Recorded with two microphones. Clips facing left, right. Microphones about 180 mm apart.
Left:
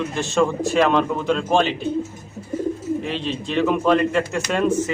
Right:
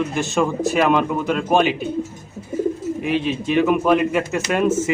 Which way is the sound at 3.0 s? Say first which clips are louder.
Right 4 dB; 10° right (ahead or behind).